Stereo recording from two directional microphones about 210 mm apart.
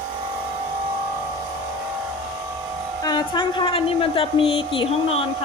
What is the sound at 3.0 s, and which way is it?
A woman's voice, 20° left (ahead or behind).